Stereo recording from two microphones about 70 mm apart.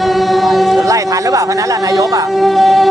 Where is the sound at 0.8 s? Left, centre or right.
Right.